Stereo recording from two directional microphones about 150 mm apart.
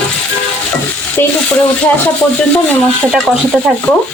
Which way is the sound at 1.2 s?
15° left (ahead or behind).